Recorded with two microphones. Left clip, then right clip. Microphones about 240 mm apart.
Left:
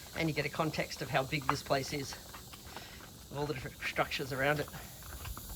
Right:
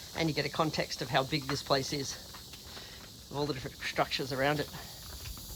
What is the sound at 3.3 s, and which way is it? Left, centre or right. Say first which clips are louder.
Speech: right 3 dB; centre.